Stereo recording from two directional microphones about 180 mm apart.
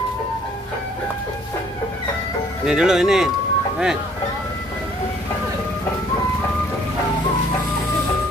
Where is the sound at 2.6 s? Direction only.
5° right (ahead or behind).